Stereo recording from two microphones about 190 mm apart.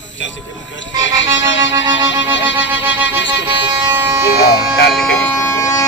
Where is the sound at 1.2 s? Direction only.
75° left (ahead or behind).